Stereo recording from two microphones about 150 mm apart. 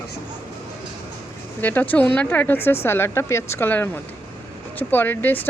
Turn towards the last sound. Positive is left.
turn(degrees=15)  # may be behind; listen again after turning